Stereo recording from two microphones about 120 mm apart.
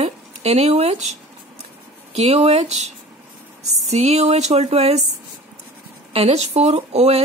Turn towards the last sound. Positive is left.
turn(degrees=-60)  # may be behind; listen again after turning